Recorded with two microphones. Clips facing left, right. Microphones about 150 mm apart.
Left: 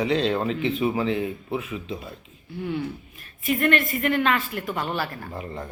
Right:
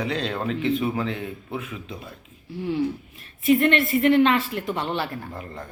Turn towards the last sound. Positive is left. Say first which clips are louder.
# left 2 dB
turn(degrees=5)  # may be behind; listen again after turning